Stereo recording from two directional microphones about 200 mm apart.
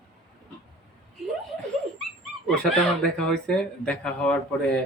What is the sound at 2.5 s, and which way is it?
Speech, centre (ahead or behind).